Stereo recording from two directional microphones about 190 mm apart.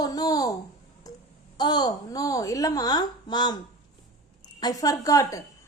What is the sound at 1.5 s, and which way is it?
A woman's voice, 20° left (ahead or behind).